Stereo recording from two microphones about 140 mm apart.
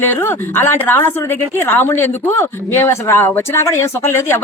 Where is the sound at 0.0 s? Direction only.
15° left (ahead or behind).